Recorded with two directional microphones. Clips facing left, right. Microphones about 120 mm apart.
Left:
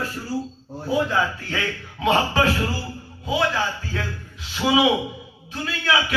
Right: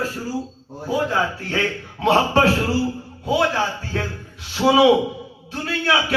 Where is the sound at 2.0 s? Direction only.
30° right (ahead or behind).